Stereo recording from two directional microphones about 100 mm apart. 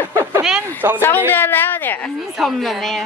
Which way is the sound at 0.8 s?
25° right (ahead or behind).